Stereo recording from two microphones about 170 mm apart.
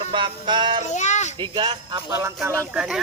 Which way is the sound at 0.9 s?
45° left (ahead or behind).